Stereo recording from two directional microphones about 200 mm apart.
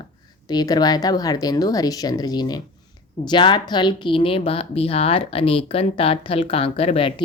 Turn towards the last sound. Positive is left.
turn(degrees=30)  # may be behind; listen again after turning